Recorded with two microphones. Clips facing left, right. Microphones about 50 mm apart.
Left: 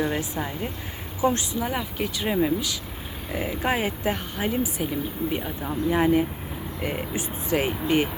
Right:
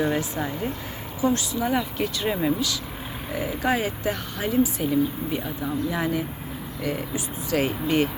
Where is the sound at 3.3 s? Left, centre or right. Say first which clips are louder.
Right 1 dB; left.